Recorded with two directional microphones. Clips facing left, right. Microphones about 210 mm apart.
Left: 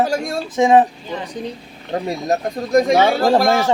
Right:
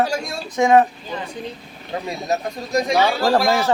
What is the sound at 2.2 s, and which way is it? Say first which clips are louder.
Speech: left 4 dB; 55° left (ahead or behind).